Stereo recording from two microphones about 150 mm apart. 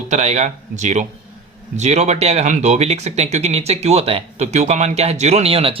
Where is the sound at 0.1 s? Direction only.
50° right (ahead or behind).